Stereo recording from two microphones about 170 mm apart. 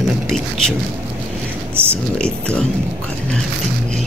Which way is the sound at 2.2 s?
5° left (ahead or behind).